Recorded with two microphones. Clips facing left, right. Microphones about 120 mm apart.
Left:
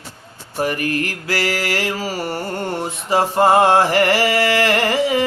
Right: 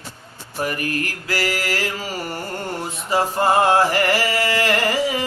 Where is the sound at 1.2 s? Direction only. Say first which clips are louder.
Left 1 dB; 40° left (ahead or behind).